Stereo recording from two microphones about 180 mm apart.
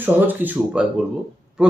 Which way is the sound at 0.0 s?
10° right (ahead or behind).